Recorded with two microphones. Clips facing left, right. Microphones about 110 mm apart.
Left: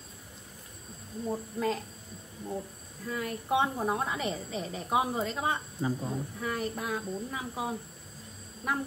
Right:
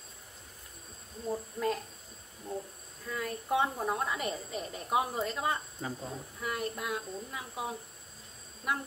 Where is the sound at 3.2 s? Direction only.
25° left (ahead or behind).